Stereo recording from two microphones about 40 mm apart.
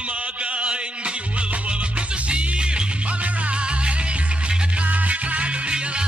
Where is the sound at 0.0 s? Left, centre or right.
Right.